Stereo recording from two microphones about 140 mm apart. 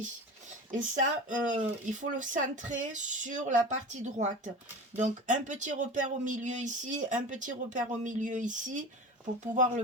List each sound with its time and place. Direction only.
0.7 s speech: 65° right (ahead or behind)